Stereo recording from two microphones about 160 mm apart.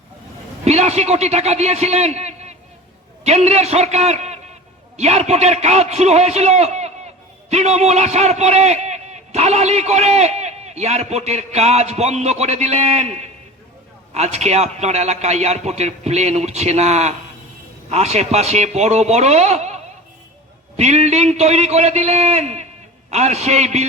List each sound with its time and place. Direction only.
0.6 s a man's voice: 40° right (ahead or behind)